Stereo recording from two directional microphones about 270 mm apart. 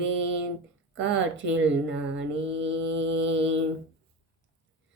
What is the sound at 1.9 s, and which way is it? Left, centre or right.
Mantra, right.